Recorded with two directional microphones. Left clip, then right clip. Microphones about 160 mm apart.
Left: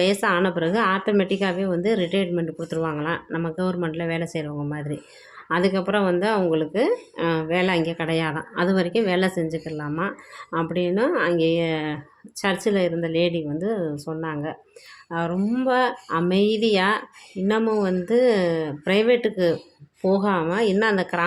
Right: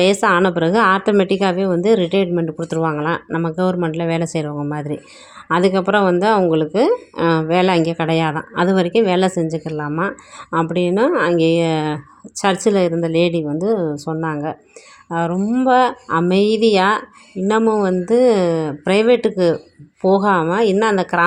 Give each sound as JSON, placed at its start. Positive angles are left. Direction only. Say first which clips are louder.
{"t": 0.0, "sound": "speech", "louder": "right 7 dB", "side_deg": -40}